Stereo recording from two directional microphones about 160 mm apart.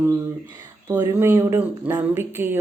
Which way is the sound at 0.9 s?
25° right (ahead or behind).